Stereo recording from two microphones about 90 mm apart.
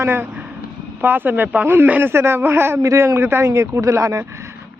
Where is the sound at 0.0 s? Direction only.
25° right (ahead or behind).